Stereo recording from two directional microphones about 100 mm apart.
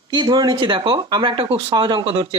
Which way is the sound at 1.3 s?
75° right (ahead or behind).